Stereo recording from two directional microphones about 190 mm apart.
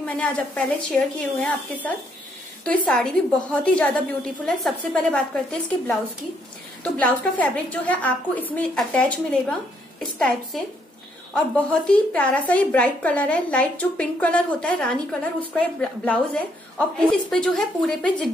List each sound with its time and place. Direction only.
0.0 s a woman's voice: 5° left (ahead or behind)